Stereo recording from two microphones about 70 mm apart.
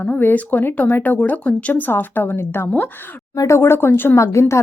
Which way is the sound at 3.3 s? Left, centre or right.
Left.